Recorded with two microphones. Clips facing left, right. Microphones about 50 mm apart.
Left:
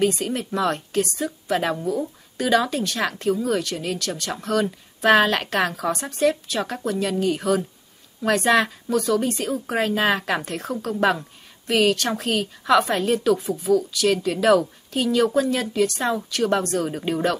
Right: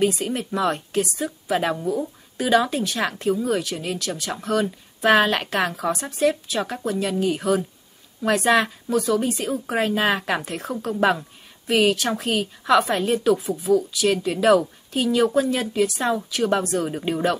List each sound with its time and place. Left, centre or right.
0.0 s a woman's voice: centre